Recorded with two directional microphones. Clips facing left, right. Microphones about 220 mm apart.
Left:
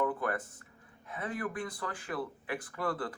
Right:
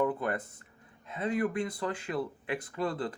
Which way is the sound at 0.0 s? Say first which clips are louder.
Right 2 dB; 20° right (ahead or behind).